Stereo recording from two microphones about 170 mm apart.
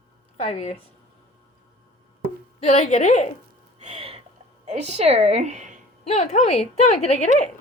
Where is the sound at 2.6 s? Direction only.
40° left (ahead or behind).